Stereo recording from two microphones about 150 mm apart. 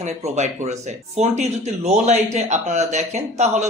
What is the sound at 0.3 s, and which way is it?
Speech, 50° right (ahead or behind).